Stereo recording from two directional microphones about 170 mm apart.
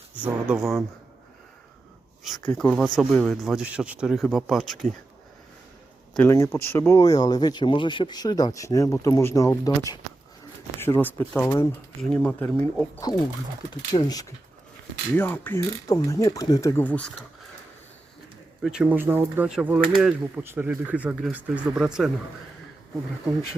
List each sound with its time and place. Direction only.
0.2 s speech: 5° right (ahead or behind)
2.6 s speech: centre (ahead or behind)
6.1 s speech: 15° left (ahead or behind)
11.9 s speech: 5° left (ahead or behind)
13.1 s speech: 20° left (ahead or behind)
15.1 s speech: 10° left (ahead or behind)
18.6 s speech: 5° right (ahead or behind)